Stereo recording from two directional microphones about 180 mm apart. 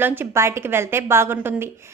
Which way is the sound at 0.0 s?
10° right (ahead or behind).